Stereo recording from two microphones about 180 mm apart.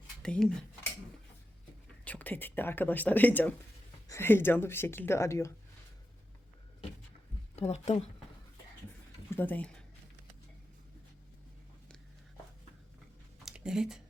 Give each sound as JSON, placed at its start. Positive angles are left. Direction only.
{"t": 0.2, "sound": "speech", "side_deg": 5}
{"t": 2.0, "sound": "speech", "side_deg": 10}
{"t": 7.7, "sound": "speech", "side_deg": 40}
{"t": 9.3, "sound": "speech", "side_deg": 10}
{"t": 13.4, "sound": "a sound", "side_deg": -5}